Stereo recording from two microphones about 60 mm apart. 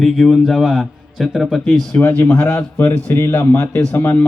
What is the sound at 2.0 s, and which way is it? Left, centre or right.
Speech, left.